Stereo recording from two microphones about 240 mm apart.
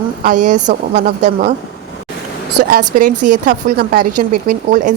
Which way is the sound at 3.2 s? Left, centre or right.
Right.